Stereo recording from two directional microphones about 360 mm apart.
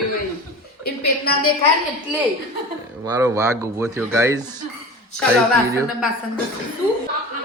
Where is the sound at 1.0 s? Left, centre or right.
Left.